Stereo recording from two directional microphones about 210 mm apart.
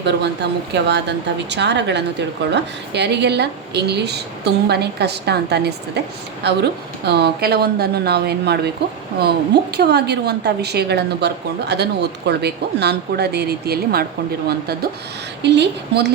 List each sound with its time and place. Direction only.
0.0 s speech: 55° right (ahead or behind)
9.7 s speech: 50° right (ahead or behind)